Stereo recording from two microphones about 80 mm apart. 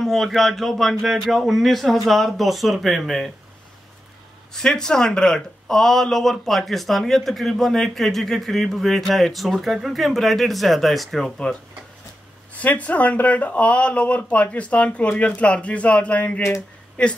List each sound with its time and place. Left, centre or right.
0.0 s speech: centre
4.6 s speech: centre
12.5 s speech: centre